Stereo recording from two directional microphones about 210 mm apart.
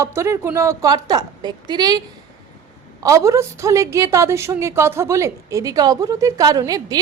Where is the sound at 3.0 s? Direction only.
15° right (ahead or behind).